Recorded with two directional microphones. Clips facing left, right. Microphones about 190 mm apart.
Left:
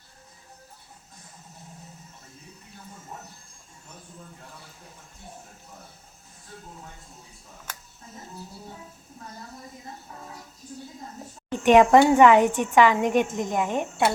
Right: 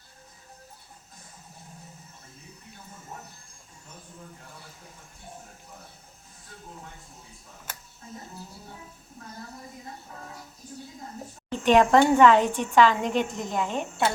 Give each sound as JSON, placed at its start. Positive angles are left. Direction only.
{"t": 11.6, "sound": "a woman's voice", "side_deg": 15}